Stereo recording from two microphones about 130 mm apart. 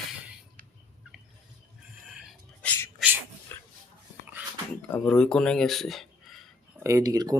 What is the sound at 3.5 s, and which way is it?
Dog, 15° left (ahead or behind).